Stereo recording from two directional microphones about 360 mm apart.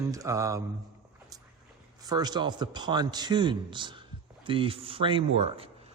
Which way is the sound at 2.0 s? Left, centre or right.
Centre.